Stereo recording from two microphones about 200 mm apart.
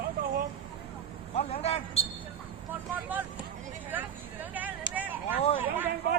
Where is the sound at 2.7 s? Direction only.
10° right (ahead or behind).